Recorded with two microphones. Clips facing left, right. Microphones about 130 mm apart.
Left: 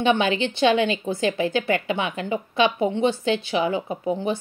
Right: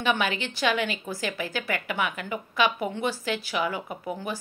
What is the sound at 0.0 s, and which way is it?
A woman's voice, 25° left (ahead or behind).